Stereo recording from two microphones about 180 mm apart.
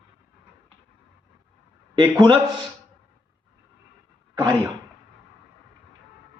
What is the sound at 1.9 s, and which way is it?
Speech, 25° right (ahead or behind).